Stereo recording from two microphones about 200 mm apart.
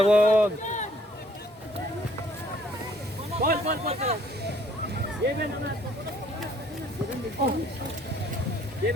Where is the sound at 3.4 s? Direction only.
50° right (ahead or behind).